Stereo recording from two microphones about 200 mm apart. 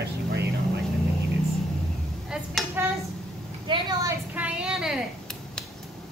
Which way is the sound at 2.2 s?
5° right (ahead or behind).